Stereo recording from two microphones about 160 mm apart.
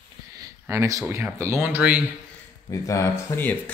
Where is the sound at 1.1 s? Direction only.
15° right (ahead or behind).